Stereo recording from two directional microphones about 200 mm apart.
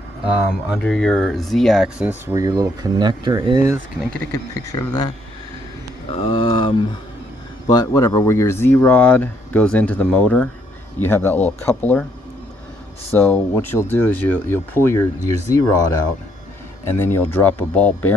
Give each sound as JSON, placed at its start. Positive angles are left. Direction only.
{"t": 0.7, "sound": "speech", "side_deg": 5}
{"t": 4.0, "sound": "speech", "side_deg": 5}
{"t": 6.1, "sound": "speech", "side_deg": 25}
{"t": 13.1, "sound": "speech", "side_deg": 10}